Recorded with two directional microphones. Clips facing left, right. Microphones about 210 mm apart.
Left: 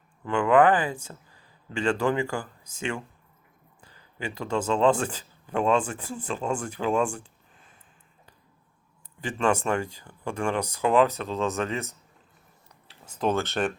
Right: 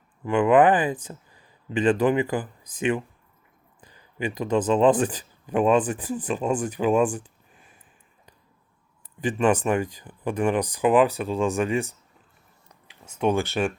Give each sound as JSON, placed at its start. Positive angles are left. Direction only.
{"t": 0.3, "sound": "speech", "side_deg": -20}
{"t": 9.2, "sound": "speech", "side_deg": -15}
{"t": 13.1, "sound": "speech", "side_deg": -10}